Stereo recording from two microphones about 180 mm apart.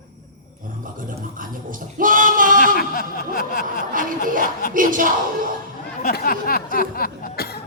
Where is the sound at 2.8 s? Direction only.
50° left (ahead or behind).